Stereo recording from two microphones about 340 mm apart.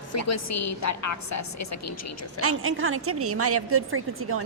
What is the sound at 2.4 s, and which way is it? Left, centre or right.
A woman's voice, right.